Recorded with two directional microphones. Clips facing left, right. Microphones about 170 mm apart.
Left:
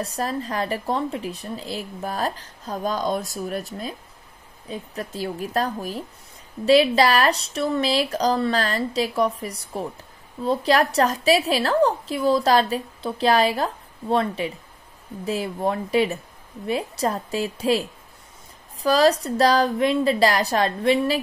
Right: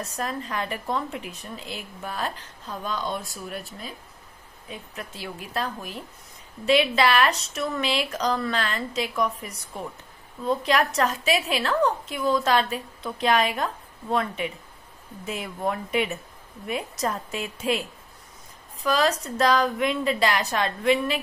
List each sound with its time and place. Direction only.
0.0 s a woman's voice: 35° left (ahead or behind)